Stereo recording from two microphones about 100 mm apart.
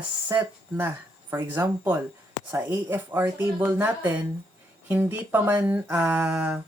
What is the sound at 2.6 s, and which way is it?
Speech, 20° right (ahead or behind).